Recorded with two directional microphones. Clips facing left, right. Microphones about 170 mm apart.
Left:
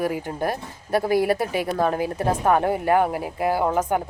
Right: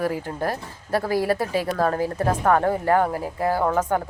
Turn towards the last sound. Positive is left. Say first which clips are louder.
# even
turn(degrees=15)  # may be behind; listen again after turning